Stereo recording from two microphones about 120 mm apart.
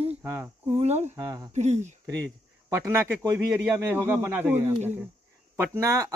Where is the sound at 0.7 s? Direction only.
70° right (ahead or behind).